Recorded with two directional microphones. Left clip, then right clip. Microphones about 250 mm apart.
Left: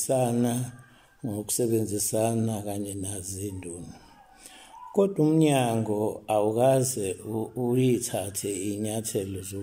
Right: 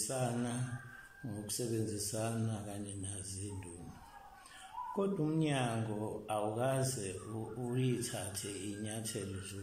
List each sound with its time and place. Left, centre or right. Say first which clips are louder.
0.0 s speech: left 13 dB; left
4.9 s speech: left 14 dB; left